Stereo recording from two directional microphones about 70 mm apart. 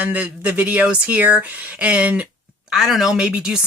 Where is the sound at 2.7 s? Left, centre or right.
Centre.